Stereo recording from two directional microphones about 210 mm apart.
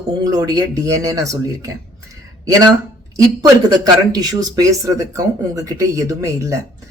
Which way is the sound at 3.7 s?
20° right (ahead or behind).